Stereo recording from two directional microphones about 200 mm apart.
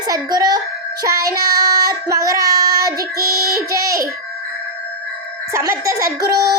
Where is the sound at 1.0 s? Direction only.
15° right (ahead or behind).